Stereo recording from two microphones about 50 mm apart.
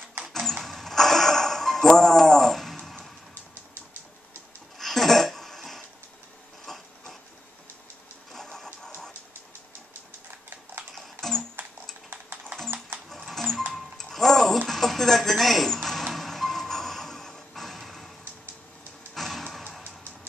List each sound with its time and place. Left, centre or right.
0.3 s a sound: centre
4.7 s a sound: centre
8.3 s engine: centre
11.0 s music: centre
12.1 s music: right
13.3 s music: centre
19.1 s music: centre